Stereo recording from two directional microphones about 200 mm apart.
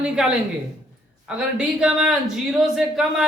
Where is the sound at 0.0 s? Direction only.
5° right (ahead or behind).